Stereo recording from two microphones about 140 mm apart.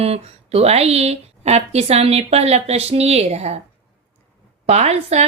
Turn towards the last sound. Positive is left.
turn(degrees=-50)  # may be behind; listen again after turning